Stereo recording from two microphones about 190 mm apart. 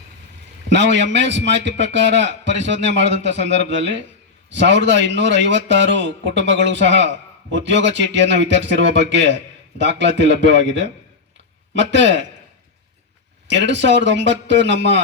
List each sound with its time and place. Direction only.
0.7 s a man's voice: 70° right (ahead or behind)
11.7 s a man's voice: 70° right (ahead or behind)
13.5 s a man's voice: 70° right (ahead or behind)